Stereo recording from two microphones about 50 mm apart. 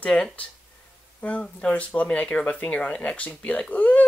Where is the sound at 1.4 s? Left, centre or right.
Left.